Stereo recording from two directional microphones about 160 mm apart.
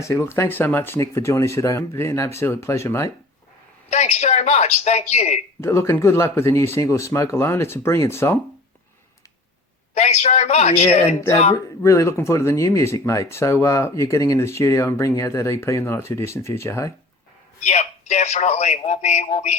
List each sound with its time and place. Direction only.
0.0 s speech: 15° left (ahead or behind)
3.8 s a man's voice: 45° left (ahead or behind)
5.5 s speech: 15° left (ahead or behind)
9.9 s a man's voice: 45° left (ahead or behind)
11.5 s speech: 20° left (ahead or behind)
17.6 s a man's voice: 45° left (ahead or behind)